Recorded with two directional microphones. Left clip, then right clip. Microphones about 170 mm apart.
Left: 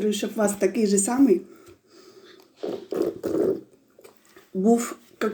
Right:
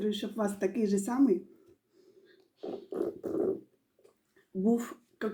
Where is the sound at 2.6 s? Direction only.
10° left (ahead or behind).